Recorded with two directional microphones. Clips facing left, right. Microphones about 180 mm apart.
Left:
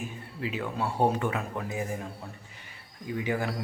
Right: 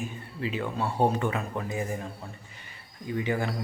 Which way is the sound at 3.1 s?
5° left (ahead or behind).